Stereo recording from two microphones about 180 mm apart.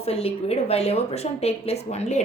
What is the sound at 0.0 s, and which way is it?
A woman's voice, 35° left (ahead or behind).